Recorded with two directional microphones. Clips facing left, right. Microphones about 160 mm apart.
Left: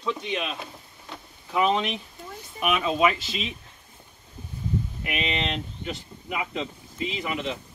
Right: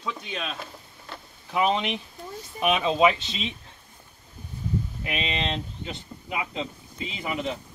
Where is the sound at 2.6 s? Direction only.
25° right (ahead or behind).